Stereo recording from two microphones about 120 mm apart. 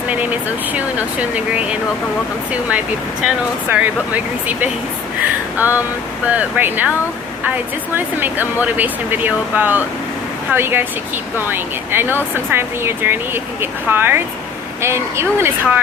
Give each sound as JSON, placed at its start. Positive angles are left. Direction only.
{"t": 0.1, "sound": "speech", "side_deg": -15}
{"t": 5.2, "sound": "a sound", "side_deg": -15}
{"t": 6.2, "sound": "speech", "side_deg": -15}